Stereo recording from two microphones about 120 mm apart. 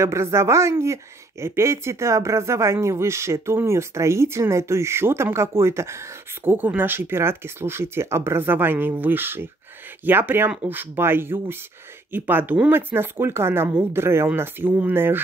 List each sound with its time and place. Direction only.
0.0 s speech: 25° right (ahead or behind)